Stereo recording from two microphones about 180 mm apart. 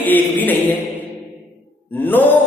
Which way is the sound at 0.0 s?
10° left (ahead or behind).